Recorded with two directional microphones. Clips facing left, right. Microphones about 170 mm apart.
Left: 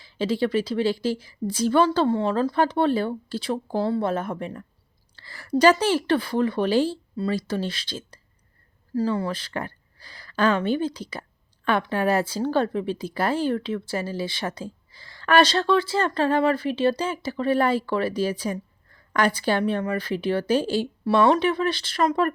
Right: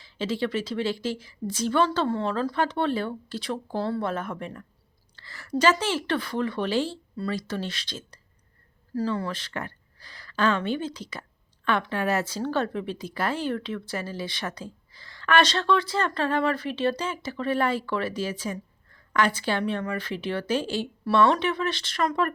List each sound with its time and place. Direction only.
0.0 s speech: 35° left (ahead or behind)
9.2 s speech: 35° left (ahead or behind)